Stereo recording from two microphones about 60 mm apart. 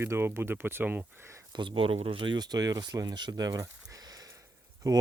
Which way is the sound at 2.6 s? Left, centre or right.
Right.